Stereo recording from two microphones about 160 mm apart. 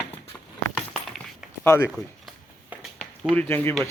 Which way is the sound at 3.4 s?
15° left (ahead or behind).